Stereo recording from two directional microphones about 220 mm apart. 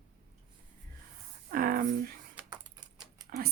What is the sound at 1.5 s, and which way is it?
Speech, 40° right (ahead or behind).